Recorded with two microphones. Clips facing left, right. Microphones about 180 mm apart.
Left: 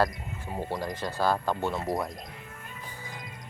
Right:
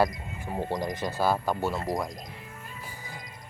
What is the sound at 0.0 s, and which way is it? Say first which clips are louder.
Speech: right 1 dB; 15° right (ahead or behind).